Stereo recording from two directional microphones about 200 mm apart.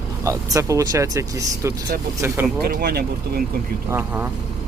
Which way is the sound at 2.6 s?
50° right (ahead or behind).